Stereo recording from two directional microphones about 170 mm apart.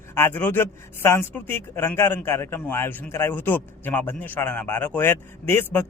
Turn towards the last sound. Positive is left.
turn(degrees=15)  # may be behind; listen again after turning